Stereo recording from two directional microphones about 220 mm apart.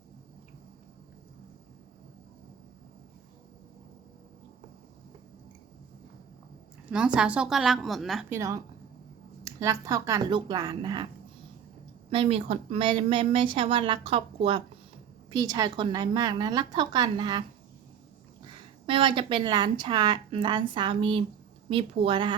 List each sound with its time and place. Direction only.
6.9 s a woman's voice: 5° right (ahead or behind)
8.3 s speech: 15° right (ahead or behind)
12.1 s a woman's voice: 25° right (ahead or behind)
18.9 s a woman's voice: 20° right (ahead or behind)